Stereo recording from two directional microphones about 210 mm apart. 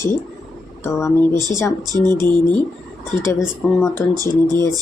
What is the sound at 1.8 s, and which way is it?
Speech, 20° right (ahead or behind).